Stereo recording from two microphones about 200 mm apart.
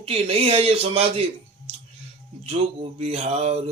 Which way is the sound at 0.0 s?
30° right (ahead or behind).